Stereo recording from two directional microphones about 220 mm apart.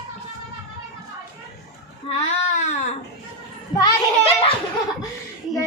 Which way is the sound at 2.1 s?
25° left (ahead or behind).